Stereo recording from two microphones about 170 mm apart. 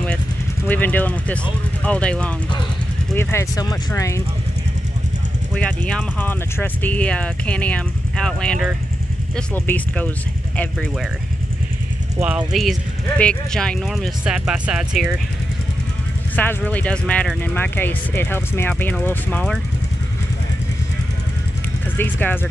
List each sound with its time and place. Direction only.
0.7 s speech: 10° left (ahead or behind)
5.5 s speech: 5° left (ahead or behind)
12.2 s speech: 10° right (ahead or behind)
16.3 s speech: 10° left (ahead or behind)
21.9 s speech: 10° left (ahead or behind)